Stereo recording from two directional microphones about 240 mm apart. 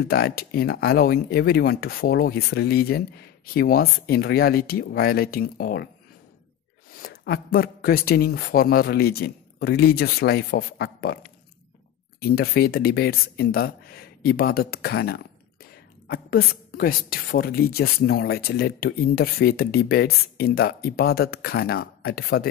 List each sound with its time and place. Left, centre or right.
0.0 s a woman's voice: left
7.0 s a woman's voice: left
12.2 s a woman's voice: left